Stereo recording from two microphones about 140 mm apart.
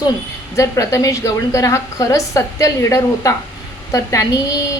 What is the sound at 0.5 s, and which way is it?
A woman's voice, 20° left (ahead or behind).